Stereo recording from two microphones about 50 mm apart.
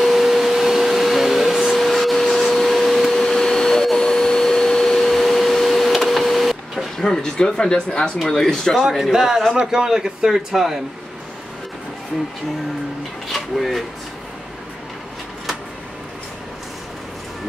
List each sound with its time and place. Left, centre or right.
0.0 s vacuum cleaner: centre
7.0 s speech: centre
8.8 s a man's voice: centre
13.3 s speech: centre